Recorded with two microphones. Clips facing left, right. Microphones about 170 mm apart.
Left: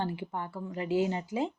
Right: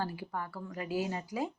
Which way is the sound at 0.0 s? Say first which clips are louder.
Left 3 dB; 25° left (ahead or behind).